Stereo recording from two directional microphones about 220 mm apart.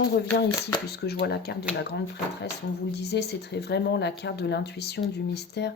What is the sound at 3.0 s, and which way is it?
Speech, 50° left (ahead or behind).